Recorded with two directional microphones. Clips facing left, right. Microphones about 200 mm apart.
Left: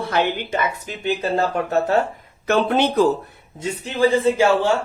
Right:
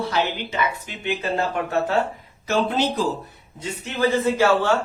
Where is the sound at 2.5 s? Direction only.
60° left (ahead or behind).